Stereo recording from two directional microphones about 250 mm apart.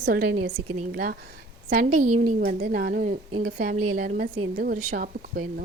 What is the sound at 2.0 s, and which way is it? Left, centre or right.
Speech, right.